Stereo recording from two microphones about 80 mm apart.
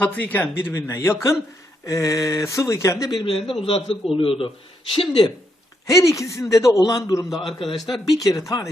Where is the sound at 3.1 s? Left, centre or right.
Left.